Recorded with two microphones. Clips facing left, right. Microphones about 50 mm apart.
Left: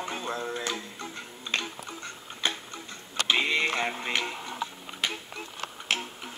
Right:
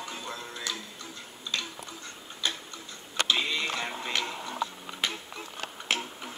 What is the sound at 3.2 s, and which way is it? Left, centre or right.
Music, left.